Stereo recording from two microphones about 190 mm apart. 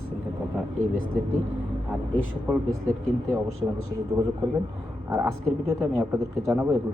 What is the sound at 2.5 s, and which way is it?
Speech, 5° right (ahead or behind).